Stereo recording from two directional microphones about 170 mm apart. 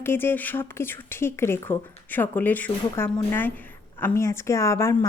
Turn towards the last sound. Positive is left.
turn(degrees=15)  # may be behind; listen again after turning